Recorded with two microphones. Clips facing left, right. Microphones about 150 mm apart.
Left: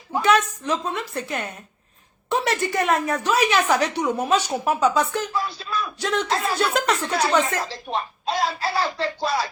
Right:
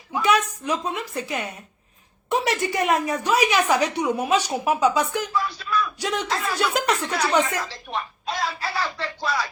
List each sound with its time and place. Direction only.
0.3 s a woman's voice: 10° right (ahead or behind)
5.3 s speech: 30° left (ahead or behind)
6.0 s a woman's voice: 10° right (ahead or behind)
6.2 s speech: 30° left (ahead or behind)